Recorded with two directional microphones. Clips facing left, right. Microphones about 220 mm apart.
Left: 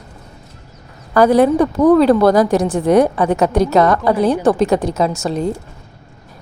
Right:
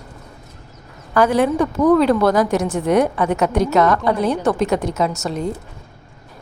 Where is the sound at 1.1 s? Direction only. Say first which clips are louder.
Left 5 dB; 35° left (ahead or behind).